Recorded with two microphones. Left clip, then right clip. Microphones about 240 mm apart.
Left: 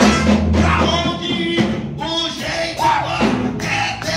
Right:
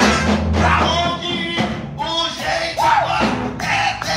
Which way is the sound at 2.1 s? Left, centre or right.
Centre.